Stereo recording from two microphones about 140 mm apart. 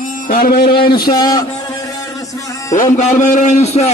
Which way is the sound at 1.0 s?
30° left (ahead or behind).